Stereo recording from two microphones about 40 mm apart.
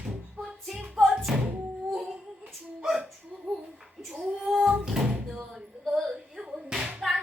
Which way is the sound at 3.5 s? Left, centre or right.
Centre.